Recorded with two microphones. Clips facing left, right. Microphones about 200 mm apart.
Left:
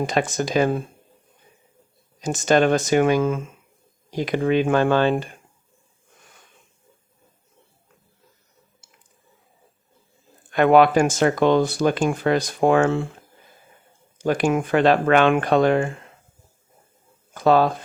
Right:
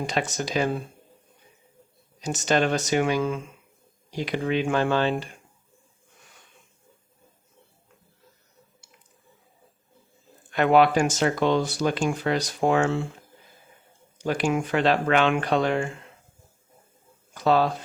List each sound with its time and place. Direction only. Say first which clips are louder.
0.0 s speech: left 5 dB; 50° left (ahead or behind)
2.2 s speech: left 5 dB; 50° left (ahead or behind)
10.5 s speech: left 4 dB; 55° left (ahead or behind)
14.2 s speech: left 4 dB; 50° left (ahead or behind)
17.3 s speech: left 4 dB; 50° left (ahead or behind)